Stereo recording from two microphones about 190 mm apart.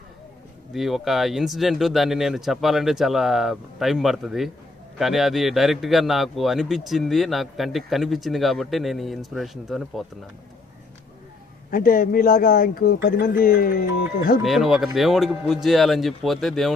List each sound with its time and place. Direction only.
0.7 s a man's voice: centre (ahead or behind)
11.7 s speech: 45° left (ahead or behind)
14.4 s a man's voice: centre (ahead or behind)